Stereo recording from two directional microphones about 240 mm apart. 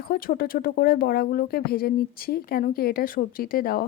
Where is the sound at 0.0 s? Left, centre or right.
Left.